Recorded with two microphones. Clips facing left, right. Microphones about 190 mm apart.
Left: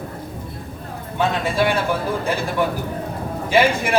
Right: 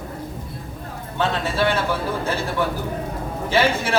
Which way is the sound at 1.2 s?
15° left (ahead or behind).